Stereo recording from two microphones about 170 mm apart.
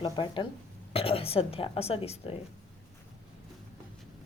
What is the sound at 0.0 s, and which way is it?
A woman's voice, 30° left (ahead or behind).